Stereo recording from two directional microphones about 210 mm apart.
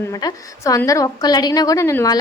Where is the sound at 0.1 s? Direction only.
15° left (ahead or behind).